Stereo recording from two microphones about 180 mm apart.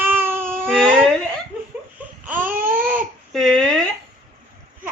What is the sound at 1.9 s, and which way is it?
Baby cry, 10° right (ahead or behind).